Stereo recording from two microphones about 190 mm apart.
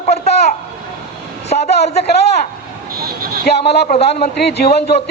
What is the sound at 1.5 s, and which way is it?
Speech, 45° left (ahead or behind).